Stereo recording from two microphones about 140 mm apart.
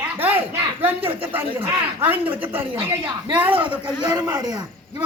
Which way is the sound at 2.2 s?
40° right (ahead or behind).